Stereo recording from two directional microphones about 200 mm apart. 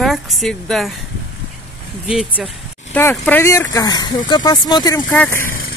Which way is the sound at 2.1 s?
5° right (ahead or behind).